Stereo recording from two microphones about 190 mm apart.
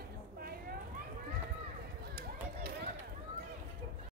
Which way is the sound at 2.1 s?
50° right (ahead or behind).